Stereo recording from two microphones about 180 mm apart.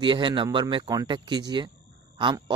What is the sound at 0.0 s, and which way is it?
Speech, 25° right (ahead or behind).